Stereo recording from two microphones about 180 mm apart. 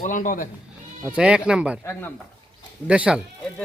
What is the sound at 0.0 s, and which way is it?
Speech, 45° left (ahead or behind).